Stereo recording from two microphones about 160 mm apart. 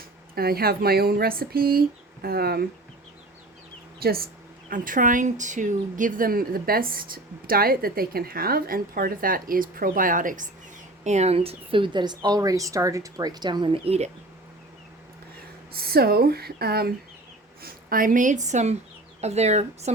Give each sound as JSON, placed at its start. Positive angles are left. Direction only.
{"t": 0.3, "sound": "speech", "side_deg": -70}
{"t": 4.0, "sound": "speech", "side_deg": -70}
{"t": 4.7, "sound": "speech", "side_deg": -60}
{"t": 11.0, "sound": "a woman's voice", "side_deg": -45}
{"t": 15.7, "sound": "speech", "side_deg": -75}
{"t": 17.6, "sound": "a woman's voice", "side_deg": -65}